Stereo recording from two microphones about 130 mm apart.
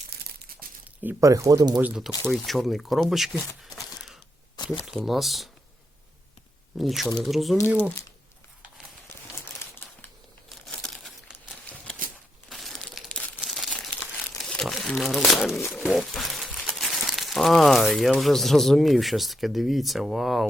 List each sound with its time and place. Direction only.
1.2 s speech: 25° right (ahead or behind)
1.8 s speech: 5° right (ahead or behind)
2.2 s speech: 5° left (ahead or behind)
3.8 s a sound: centre (ahead or behind)
4.5 s a sound: 35° left (ahead or behind)
4.9 s speech: centre (ahead or behind)
6.7 s speech: centre (ahead or behind)
10.7 s crumpling: 5° left (ahead or behind)
11.7 s a sound: 10° left (ahead or behind)
12.5 s crumpling: centre (ahead or behind)
14.4 s speech: centre (ahead or behind)